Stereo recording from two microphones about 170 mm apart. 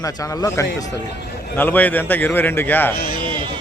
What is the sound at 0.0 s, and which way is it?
A man's voice, 20° left (ahead or behind).